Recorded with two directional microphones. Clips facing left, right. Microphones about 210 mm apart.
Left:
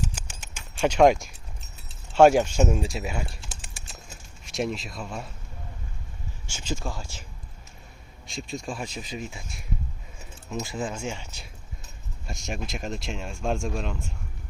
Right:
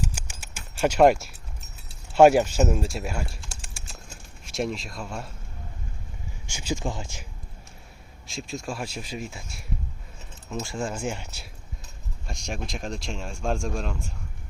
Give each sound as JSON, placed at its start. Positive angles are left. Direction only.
{"t": 0.0, "sound": "a sound", "side_deg": -10}
{"t": 2.1, "sound": "speech", "side_deg": -10}
{"t": 6.5, "sound": "speech", "side_deg": -15}
{"t": 8.3, "sound": "speech", "side_deg": 0}
{"t": 11.1, "sound": "speech", "side_deg": -10}
{"t": 12.3, "sound": "speech", "side_deg": 0}